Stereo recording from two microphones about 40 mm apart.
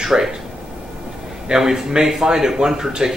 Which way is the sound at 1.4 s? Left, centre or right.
Centre.